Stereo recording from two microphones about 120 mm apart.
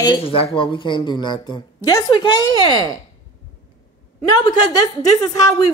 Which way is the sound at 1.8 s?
25° left (ahead or behind).